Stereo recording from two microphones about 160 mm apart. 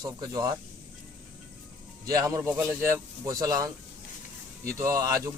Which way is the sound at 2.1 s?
20° right (ahead or behind).